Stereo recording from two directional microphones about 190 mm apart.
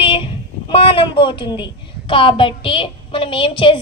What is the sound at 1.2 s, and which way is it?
A woman's voice, 25° left (ahead or behind).